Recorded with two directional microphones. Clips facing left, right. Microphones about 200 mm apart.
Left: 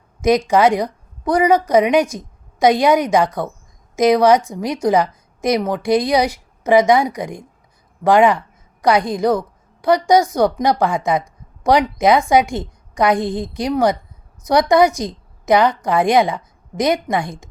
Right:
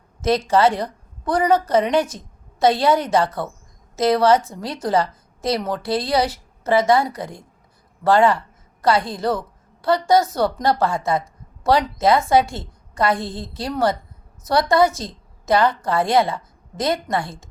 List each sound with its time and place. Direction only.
0.2 s a woman's voice: 15° left (ahead or behind)